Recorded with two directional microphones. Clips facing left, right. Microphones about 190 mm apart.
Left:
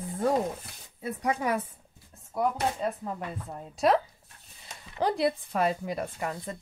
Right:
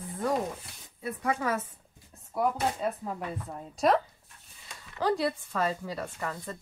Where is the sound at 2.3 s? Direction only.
Centre (ahead or behind).